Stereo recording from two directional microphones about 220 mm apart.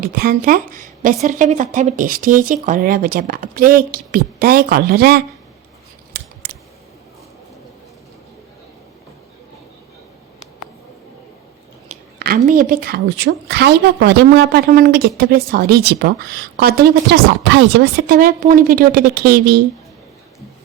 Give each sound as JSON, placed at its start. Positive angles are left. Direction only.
{"t": 0.0, "sound": "a woman's voice", "side_deg": -40}
{"t": 6.1, "sound": "scissors", "side_deg": -45}
{"t": 11.9, "sound": "a woman's voice", "side_deg": -40}